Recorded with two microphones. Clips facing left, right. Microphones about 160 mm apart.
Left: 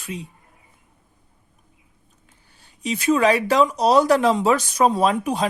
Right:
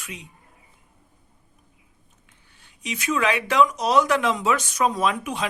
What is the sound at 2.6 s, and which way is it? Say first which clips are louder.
Speech: left 8 dB; 35° left (ahead or behind).